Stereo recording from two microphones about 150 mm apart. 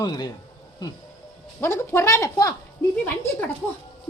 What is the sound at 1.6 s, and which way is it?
Speech, 15° left (ahead or behind).